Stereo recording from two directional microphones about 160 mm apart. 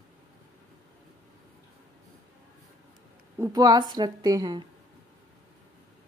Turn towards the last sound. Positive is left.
turn(degrees=-25)  # may be behind; listen again after turning